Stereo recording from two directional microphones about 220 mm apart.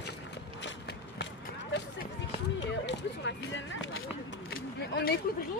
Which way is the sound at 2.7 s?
55° left (ahead or behind).